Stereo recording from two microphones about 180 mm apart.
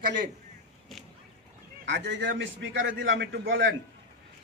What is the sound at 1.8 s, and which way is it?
A man's voice, 75° right (ahead or behind).